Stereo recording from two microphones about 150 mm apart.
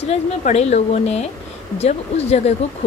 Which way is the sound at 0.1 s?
45° left (ahead or behind).